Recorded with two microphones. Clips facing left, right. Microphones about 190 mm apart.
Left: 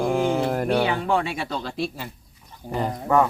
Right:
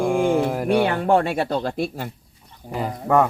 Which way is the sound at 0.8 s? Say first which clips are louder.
Right 4 dB; 50° right (ahead or behind).